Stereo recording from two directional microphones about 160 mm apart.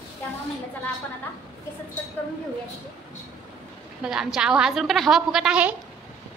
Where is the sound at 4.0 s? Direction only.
5° right (ahead or behind).